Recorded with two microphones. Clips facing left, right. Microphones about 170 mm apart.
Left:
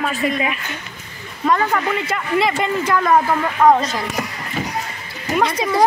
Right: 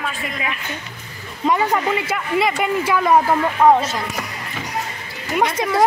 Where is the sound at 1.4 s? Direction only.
15° right (ahead or behind).